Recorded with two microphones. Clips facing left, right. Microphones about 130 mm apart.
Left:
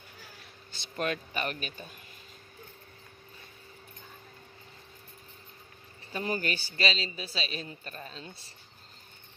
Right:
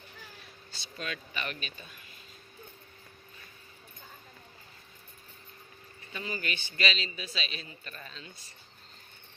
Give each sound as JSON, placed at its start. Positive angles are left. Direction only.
{"t": 0.9, "sound": "speech", "side_deg": 50}
{"t": 6.2, "sound": "a man's voice", "side_deg": 45}